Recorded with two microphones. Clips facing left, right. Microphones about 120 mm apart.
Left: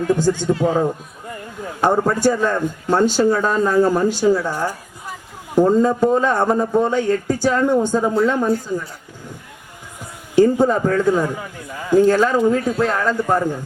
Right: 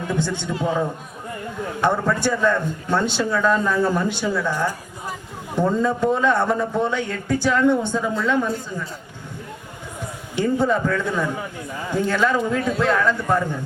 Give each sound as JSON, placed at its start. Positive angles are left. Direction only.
{"t": 0.1, "sound": "speech", "side_deg": 40}
{"t": 1.8, "sound": "speech", "side_deg": 40}
{"t": 10.3, "sound": "speech", "side_deg": 40}